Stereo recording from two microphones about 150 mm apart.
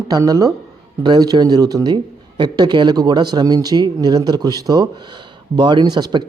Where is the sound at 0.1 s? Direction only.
25° right (ahead or behind).